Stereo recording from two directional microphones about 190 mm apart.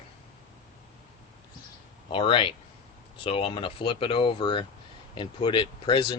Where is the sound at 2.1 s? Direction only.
25° left (ahead or behind).